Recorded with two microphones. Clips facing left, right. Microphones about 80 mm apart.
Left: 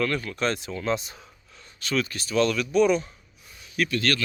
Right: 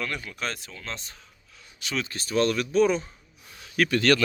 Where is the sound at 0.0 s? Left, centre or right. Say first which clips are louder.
Left 6 dB; centre.